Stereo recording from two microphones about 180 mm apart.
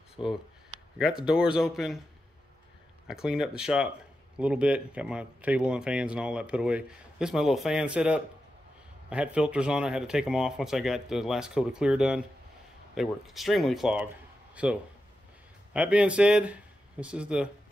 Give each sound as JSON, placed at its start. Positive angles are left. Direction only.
{"t": 0.2, "sound": "speech", "side_deg": 30}
{"t": 0.9, "sound": "speech", "side_deg": -5}
{"t": 3.1, "sound": "speech", "side_deg": -5}